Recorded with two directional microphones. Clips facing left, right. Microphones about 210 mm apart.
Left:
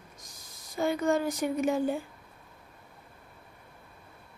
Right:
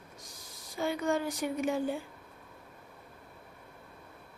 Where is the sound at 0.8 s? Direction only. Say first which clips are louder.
Left 4 dB; 45° left (ahead or behind).